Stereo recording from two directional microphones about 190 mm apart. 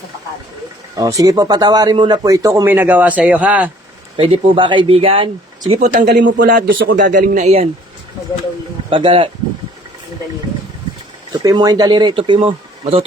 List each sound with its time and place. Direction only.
0.9 s a man's voice: 20° right (ahead or behind)
4.2 s speech: 25° right (ahead or behind)
5.9 s speech: 50° right (ahead or behind); by 7.7 s 35° right (ahead or behind)
8.9 s speech: 25° right (ahead or behind)
11.3 s speech: 20° right (ahead or behind)